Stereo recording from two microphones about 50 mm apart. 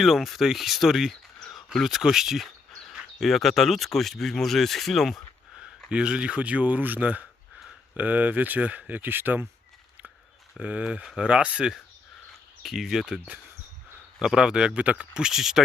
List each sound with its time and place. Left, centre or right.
0.0 s speech: centre
1.5 s a sound: centre
3.2 s speech: centre
5.5 s speech: centre; by 9.5 s right
10.6 s speech: right
12.6 s speech: centre
14.2 s speech: centre